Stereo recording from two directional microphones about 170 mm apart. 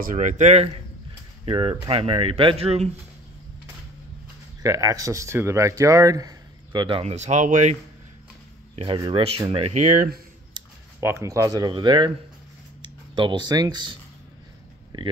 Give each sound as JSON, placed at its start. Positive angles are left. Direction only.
{"t": 0.0, "sound": "speech", "side_deg": -50}
{"t": 1.4, "sound": "speech", "side_deg": -30}
{"t": 4.6, "sound": "speech", "side_deg": -20}
{"t": 8.7, "sound": "speech", "side_deg": -30}
{"t": 10.6, "sound": "a sound", "side_deg": -25}
{"t": 11.0, "sound": "speech", "side_deg": -15}
{"t": 14.9, "sound": "speech", "side_deg": -30}